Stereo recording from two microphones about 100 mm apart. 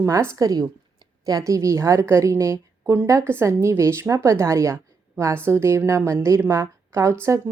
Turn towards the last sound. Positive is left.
turn(degrees=-30)  # may be behind; listen again after turning